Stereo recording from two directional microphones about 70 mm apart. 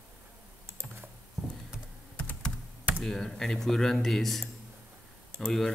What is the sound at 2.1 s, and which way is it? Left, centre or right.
Computer keyboard, centre.